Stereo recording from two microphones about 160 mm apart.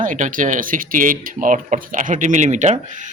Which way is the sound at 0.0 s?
55° right (ahead or behind).